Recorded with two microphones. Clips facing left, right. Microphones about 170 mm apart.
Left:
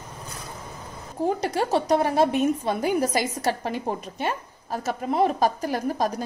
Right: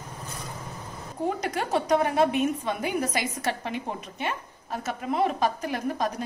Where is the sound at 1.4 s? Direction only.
30° left (ahead or behind).